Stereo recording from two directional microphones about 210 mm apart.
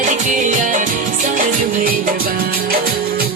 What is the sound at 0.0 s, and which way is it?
Music, 35° right (ahead or behind).